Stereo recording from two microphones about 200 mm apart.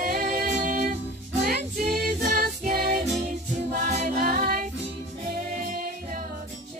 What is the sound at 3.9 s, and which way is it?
Music, 40° right (ahead or behind).